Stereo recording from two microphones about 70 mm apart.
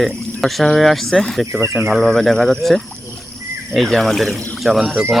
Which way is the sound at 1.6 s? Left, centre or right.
Right.